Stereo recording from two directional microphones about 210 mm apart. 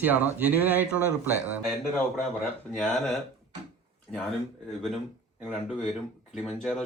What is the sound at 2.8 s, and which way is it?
Speech, centre (ahead or behind).